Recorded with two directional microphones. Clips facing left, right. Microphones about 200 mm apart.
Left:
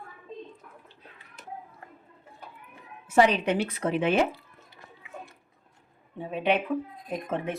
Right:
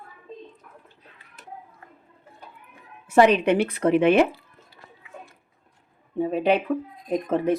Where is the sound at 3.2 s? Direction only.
60° right (ahead or behind).